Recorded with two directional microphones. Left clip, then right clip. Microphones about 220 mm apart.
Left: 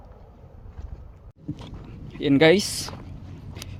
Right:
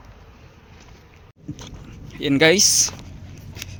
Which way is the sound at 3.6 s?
25° left (ahead or behind).